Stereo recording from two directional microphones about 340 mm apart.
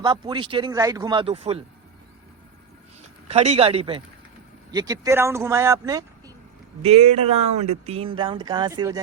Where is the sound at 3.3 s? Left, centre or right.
Centre.